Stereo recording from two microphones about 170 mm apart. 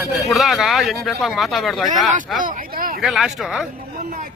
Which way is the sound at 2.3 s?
55° right (ahead or behind).